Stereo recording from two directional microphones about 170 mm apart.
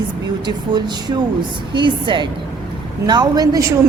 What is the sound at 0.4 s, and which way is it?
A woman's voice, 25° right (ahead or behind).